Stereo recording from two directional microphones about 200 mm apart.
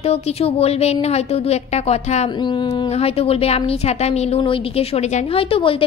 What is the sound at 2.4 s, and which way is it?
A woman's voice, 20° left (ahead or behind).